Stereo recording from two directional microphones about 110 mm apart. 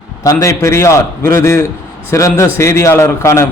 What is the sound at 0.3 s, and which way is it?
A man's voice, 30° left (ahead or behind).